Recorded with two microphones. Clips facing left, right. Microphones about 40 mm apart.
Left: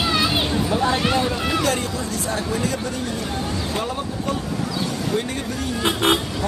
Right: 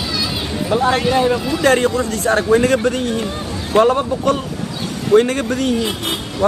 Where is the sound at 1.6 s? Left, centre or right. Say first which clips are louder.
Right 8 dB; right.